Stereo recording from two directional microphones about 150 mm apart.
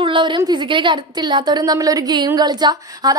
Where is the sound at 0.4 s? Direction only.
30° right (ahead or behind).